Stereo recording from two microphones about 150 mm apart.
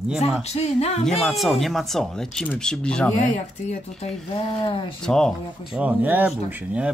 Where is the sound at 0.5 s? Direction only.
45° left (ahead or behind).